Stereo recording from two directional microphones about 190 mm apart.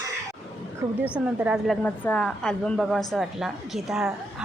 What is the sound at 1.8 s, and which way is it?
A woman's voice, 10° left (ahead or behind).